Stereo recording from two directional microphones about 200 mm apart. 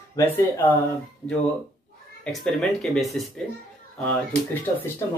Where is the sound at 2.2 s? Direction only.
5° left (ahead or behind).